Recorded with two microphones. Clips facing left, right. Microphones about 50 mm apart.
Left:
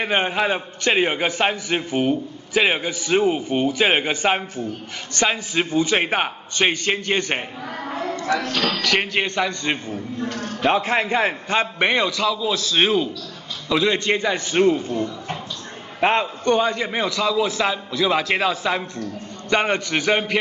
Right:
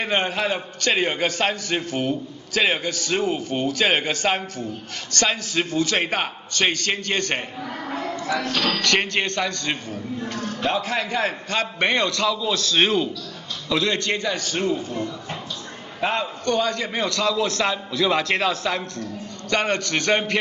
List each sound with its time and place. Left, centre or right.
0.0 s a man's voice: centre
8.5 s a man's voice: centre
10.7 s a man's voice: left
16.0 s a man's voice: left
16.4 s a man's voice: left